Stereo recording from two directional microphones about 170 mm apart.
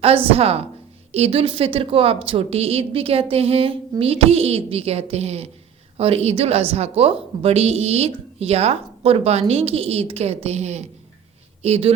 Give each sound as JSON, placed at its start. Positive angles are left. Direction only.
{"t": 0.3, "sound": "a woman's voice", "side_deg": -35}